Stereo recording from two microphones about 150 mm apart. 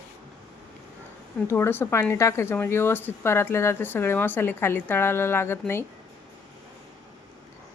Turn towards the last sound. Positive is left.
turn(degrees=15)  # may be behind; listen again after turning